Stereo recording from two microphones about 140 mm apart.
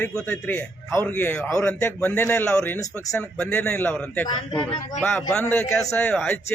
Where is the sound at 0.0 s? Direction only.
10° left (ahead or behind).